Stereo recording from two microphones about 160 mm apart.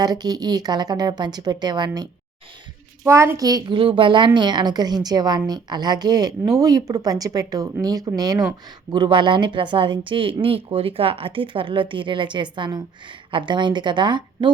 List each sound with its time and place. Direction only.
0.0 s speech: 25° right (ahead or behind)